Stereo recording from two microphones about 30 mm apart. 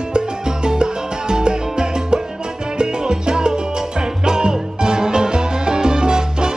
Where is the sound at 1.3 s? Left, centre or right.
Right.